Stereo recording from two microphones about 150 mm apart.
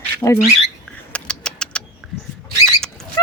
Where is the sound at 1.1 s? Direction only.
5° left (ahead or behind).